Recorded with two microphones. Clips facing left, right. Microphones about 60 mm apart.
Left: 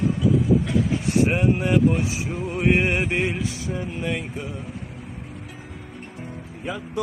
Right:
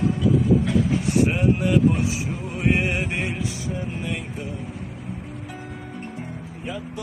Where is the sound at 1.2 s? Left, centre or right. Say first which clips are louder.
Even; left.